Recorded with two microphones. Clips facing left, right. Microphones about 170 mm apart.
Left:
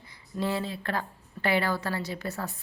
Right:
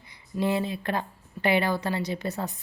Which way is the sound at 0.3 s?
20° right (ahead or behind).